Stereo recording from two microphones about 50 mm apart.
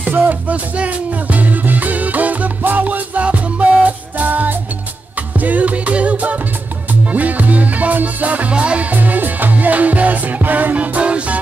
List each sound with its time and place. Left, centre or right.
0.1 s music: right
8.9 s music: right